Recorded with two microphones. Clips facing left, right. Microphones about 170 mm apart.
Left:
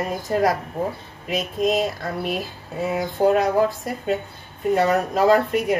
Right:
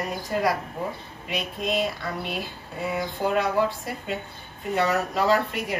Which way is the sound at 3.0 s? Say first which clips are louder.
Left 7 dB; 40° left (ahead or behind).